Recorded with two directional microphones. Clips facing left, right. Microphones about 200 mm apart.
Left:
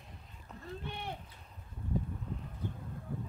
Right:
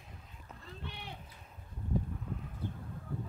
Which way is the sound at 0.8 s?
50° left (ahead or behind).